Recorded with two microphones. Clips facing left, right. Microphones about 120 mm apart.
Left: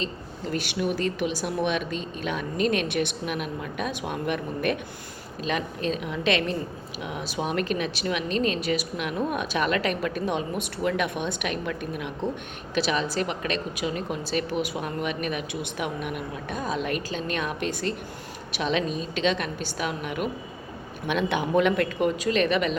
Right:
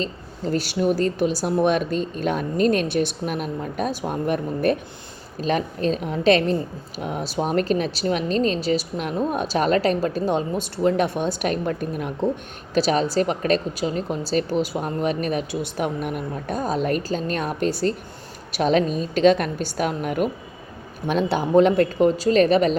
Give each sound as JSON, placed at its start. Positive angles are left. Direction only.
{"t": 0.0, "sound": "a woman's voice", "side_deg": -35}